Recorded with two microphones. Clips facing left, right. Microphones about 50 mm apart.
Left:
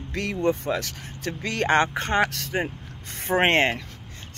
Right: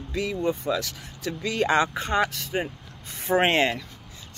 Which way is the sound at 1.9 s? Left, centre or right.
Left.